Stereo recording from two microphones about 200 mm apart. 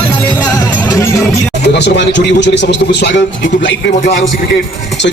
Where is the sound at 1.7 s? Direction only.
60° left (ahead or behind).